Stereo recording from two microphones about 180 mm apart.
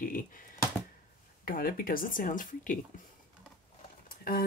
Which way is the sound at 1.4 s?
55° left (ahead or behind).